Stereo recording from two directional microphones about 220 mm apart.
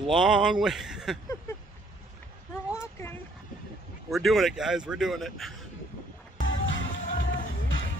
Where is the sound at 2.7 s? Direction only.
10° left (ahead or behind).